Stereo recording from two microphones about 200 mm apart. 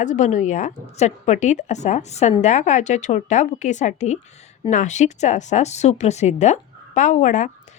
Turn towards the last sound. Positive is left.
turn(degrees=40)  # may be behind; listen again after turning